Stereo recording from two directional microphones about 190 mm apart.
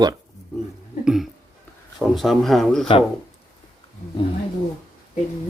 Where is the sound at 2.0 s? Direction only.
Centre (ahead or behind).